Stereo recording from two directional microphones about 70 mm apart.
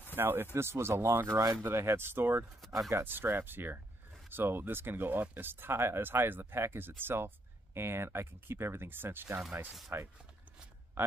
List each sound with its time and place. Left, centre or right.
0.1 s speech: right